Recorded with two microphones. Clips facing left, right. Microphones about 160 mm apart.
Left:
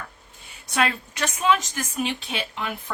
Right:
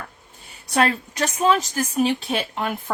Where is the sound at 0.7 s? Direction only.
35° right (ahead or behind).